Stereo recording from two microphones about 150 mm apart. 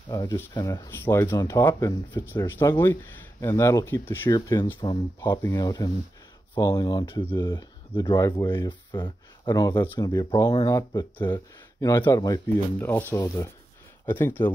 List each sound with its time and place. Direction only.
0.1 s speech: 20° left (ahead or behind)
4.7 s speech: 30° left (ahead or behind)
8.6 s speech: 30° left (ahead or behind)
12.7 s speech: 10° left (ahead or behind)